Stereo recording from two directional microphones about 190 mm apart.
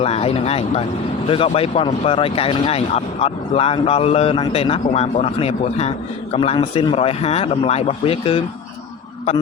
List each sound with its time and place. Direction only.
0.0 s speech: 30° left (ahead or behind)